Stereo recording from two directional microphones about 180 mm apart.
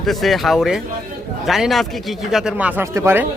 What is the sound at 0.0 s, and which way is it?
A man's voice, centre (ahead or behind).